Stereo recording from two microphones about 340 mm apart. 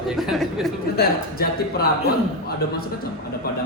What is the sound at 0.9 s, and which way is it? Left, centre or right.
Speech, left.